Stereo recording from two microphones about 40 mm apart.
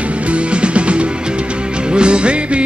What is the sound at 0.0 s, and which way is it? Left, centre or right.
Music, right.